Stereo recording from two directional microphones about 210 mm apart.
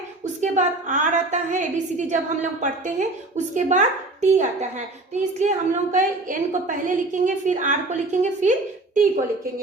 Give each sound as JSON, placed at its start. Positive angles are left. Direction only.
{"t": 0.4, "sound": "a woman's voice", "side_deg": -35}